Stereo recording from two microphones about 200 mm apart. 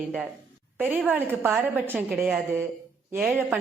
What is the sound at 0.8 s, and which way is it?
A woman's voice, 10° right (ahead or behind).